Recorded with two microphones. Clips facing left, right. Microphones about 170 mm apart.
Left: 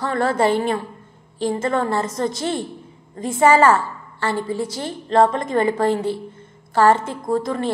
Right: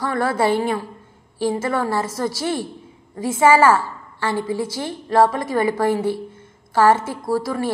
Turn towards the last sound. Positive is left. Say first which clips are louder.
# even
turn(degrees=-5)  # may be behind; listen again after turning